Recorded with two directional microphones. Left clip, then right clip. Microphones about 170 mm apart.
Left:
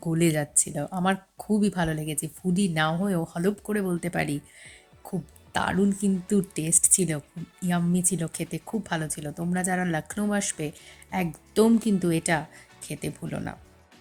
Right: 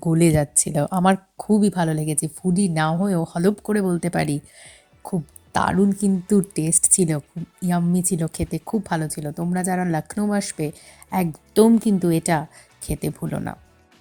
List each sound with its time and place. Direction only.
0.0 s speech: 30° right (ahead or behind)